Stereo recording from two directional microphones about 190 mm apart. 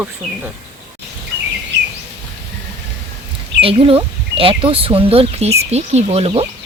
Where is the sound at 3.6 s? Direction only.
30° right (ahead or behind).